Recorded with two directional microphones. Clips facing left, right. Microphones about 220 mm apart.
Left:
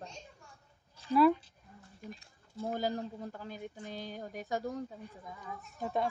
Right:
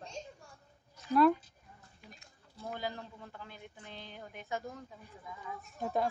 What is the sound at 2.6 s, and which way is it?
Speech, 40° left (ahead or behind).